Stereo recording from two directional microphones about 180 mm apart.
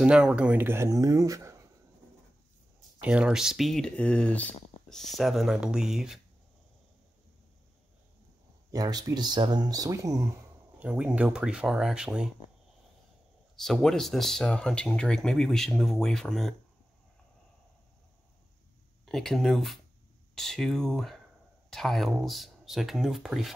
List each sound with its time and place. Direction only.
0.0 s speech: 5° right (ahead or behind)
3.0 s speech: 5° right (ahead or behind)
8.7 s speech: 20° right (ahead or behind)
10.8 s speech: 5° right (ahead or behind)
13.6 s speech: centre (ahead or behind)
19.0 s speech: centre (ahead or behind)